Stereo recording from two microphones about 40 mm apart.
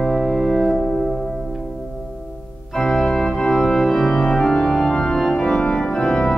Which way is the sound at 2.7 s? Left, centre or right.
Centre.